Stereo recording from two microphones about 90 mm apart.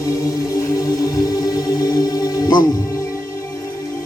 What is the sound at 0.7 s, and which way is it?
Music, 45° left (ahead or behind).